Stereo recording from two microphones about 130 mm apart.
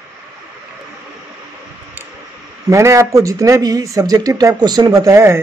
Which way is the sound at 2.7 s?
25° right (ahead or behind).